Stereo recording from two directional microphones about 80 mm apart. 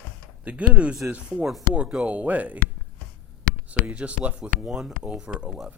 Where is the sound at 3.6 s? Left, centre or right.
Centre.